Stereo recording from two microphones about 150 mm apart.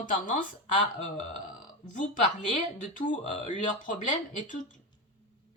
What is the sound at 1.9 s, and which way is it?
Speech, 60° left (ahead or behind).